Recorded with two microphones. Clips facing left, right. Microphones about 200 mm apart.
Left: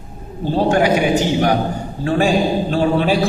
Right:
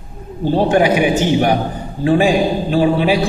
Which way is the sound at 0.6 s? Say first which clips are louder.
Right 1 dB; 15° right (ahead or behind).